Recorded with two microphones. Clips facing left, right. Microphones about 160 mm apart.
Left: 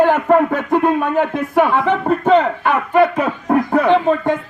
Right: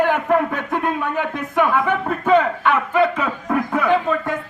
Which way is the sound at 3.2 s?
35° left (ahead or behind).